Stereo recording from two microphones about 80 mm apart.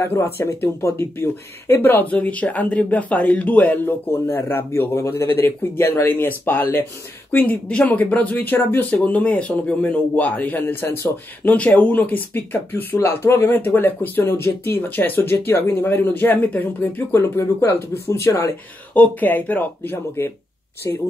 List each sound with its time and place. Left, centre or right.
0.0 s speech: left
17.2 s speech: left
18.9 s speech: left